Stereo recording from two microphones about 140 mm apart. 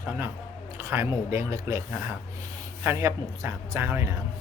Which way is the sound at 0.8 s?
20° right (ahead or behind).